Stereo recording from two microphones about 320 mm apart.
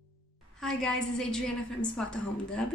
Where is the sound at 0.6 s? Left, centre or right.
Centre.